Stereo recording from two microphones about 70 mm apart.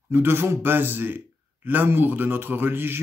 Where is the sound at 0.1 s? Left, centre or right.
Right.